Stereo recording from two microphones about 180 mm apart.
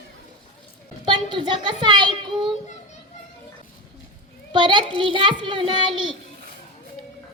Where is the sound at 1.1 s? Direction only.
25° right (ahead or behind).